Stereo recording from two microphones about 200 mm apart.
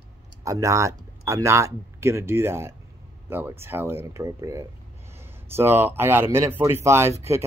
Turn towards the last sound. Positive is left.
turn(degrees=-15)  # may be behind; listen again after turning